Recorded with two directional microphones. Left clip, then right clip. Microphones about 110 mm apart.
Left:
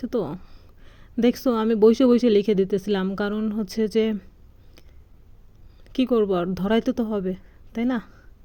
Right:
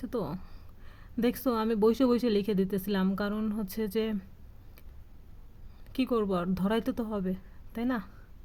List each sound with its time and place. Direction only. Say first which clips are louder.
0.0 s a sound: left 8 dB; 25° left (ahead or behind)
1.2 s a woman's voice: left 8 dB; 25° left (ahead or behind)
5.9 s a woman's voice: left 8 dB; 25° left (ahead or behind)